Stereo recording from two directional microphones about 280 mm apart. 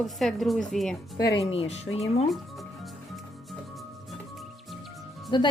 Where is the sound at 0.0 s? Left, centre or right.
Centre.